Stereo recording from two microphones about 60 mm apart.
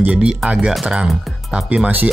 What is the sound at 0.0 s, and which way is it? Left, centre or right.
Speech, centre.